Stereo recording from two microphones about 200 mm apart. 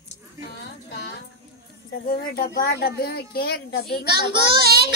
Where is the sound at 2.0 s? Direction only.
50° left (ahead or behind).